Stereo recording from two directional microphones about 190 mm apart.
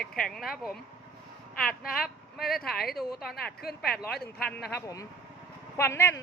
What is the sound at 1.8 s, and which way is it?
Speech, 50° left (ahead or behind).